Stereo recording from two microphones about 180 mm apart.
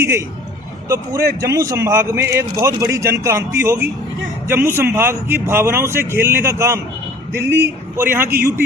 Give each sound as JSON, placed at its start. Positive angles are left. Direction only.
{"t": 0.0, "sound": "a man's voice", "side_deg": -15}